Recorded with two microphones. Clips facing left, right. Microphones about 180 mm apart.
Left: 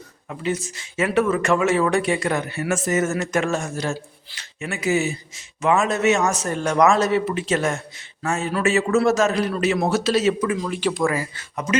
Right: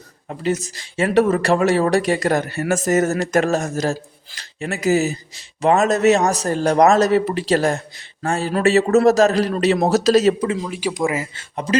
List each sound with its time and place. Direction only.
0.3 s speech: 40° right (ahead or behind)
10.6 s speech: 10° right (ahead or behind); by 11.8 s 30° right (ahead or behind)